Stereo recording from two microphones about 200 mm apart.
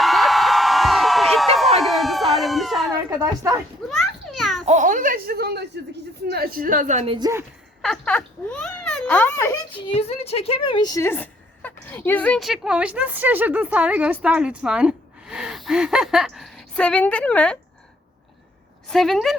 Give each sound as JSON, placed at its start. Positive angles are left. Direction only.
{"t": 0.0, "sound": "crowd", "side_deg": 0}
{"t": 1.8, "sound": "a sound", "side_deg": 0}
{"t": 3.1, "sound": "a woman's voice", "side_deg": -20}
{"t": 3.8, "sound": "a sound", "side_deg": 0}
{"t": 4.6, "sound": "a woman's voice", "side_deg": -35}
{"t": 7.8, "sound": "a woman's voice", "side_deg": 5}
{"t": 9.7, "sound": "a woman's voice", "side_deg": 25}
{"t": 18.9, "sound": "a woman's voice", "side_deg": 0}